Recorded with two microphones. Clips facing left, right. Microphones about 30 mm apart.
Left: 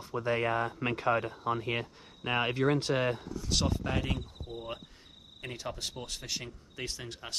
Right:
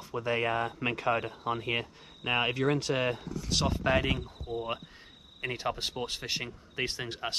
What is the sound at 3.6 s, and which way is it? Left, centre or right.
Speech, right.